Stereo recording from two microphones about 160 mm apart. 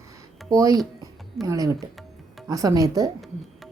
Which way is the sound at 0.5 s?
20° right (ahead or behind).